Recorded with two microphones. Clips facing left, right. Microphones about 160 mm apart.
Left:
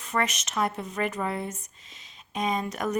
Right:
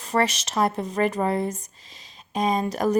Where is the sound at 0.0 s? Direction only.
35° right (ahead or behind).